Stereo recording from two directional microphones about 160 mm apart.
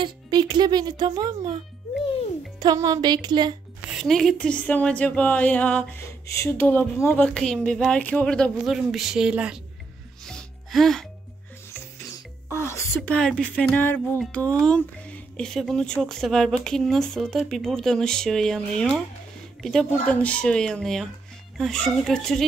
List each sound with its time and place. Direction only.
0.0 s speech: 30° right (ahead or behind)
2.6 s speech: 25° right (ahead or behind)
4.0 s speech: centre (ahead or behind)
10.2 s music: centre (ahead or behind)
12.4 s speech: 15° left (ahead or behind)